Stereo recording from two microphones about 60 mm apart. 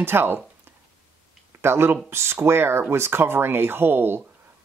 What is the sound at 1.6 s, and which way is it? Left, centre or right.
Speech, right.